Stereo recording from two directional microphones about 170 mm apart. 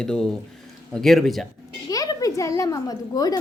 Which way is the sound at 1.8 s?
20° left (ahead or behind).